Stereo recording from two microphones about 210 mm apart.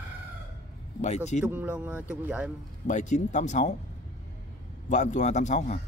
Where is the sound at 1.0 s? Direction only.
30° left (ahead or behind).